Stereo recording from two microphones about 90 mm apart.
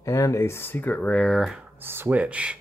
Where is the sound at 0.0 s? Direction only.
35° left (ahead or behind); by 1.4 s 10° left (ahead or behind).